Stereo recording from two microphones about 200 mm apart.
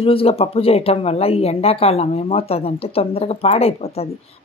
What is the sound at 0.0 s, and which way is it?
Speech, 30° left (ahead or behind).